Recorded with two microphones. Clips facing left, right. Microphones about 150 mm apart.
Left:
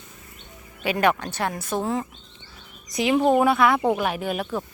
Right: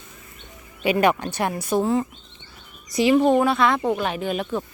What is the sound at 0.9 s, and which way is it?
Speech, 10° right (ahead or behind).